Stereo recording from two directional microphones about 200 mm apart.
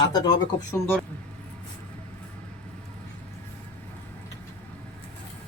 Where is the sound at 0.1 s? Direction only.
20° left (ahead or behind).